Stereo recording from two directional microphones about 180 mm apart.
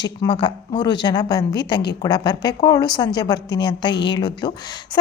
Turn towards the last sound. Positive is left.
turn(degrees=25)  # may be behind; listen again after turning